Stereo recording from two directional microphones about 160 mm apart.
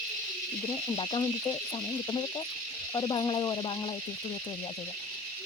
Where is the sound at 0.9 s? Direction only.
25° left (ahead or behind).